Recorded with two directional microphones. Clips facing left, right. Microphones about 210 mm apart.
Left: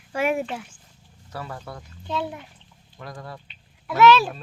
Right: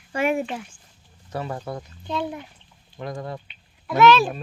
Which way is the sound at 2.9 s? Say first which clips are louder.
Right 6 dB; 25° right (ahead or behind).